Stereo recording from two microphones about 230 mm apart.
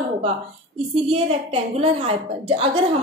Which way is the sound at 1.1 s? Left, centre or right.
Right.